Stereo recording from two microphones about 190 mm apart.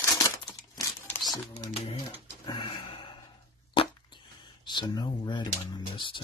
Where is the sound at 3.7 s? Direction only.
25° left (ahead or behind).